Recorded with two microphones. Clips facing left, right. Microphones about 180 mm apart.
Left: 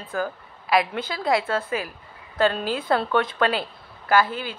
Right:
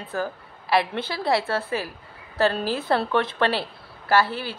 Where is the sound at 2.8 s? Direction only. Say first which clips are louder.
Left 1 dB; 25° right (ahead or behind).